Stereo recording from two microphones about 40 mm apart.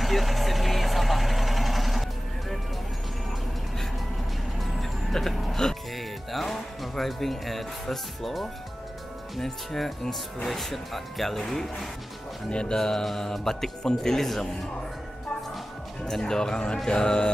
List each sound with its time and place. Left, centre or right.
0.0 s vehicle: centre
4.6 s vehicle: centre
5.1 s speech: centre
12.4 s speech: left
16.1 s speech: centre
16.7 s mantra: centre